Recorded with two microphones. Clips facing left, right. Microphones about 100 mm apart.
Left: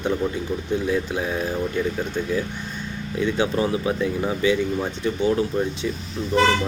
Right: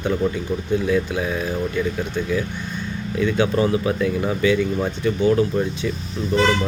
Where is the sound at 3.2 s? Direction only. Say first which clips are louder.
Right 3 dB; 30° left (ahead or behind).